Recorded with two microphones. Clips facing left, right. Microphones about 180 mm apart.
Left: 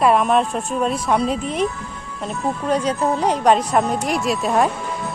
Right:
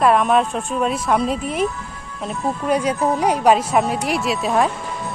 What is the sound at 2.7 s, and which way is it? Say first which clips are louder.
Speech: right 1 dB; 10° right (ahead or behind).